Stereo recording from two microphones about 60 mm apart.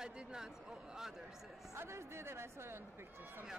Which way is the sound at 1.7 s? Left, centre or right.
Right.